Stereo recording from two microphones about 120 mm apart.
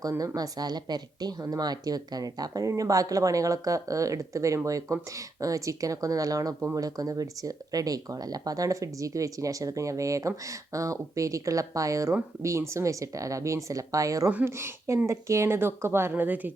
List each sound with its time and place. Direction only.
0.1 s speech: 30° right (ahead or behind)
14.3 s speech: 15° right (ahead or behind)